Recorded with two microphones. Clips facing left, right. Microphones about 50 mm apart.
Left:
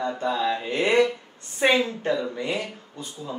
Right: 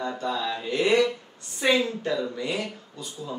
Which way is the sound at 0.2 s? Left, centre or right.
Left.